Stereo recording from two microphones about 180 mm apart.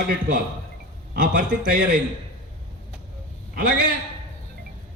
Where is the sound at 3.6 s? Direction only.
55° right (ahead or behind).